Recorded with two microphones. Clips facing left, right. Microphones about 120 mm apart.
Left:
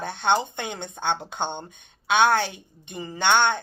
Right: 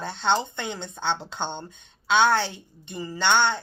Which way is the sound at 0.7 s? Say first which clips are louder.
Left 1 dB; 55° left (ahead or behind).